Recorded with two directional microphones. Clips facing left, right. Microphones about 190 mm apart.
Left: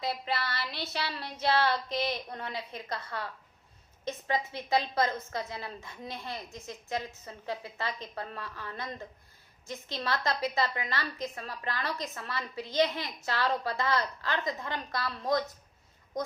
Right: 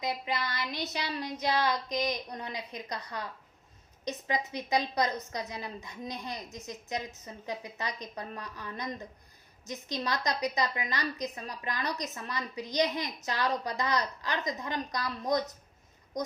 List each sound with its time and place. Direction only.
0.0 s a woman's voice: 15° right (ahead or behind)